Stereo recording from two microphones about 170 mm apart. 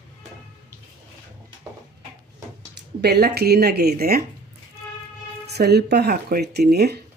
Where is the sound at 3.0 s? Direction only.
70° right (ahead or behind).